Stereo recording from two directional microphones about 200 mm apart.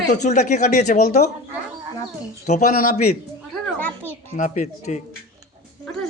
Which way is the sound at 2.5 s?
40° left (ahead or behind).